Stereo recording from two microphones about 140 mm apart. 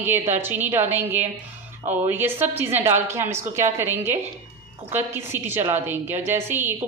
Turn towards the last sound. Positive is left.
turn(degrees=-15)  # may be behind; listen again after turning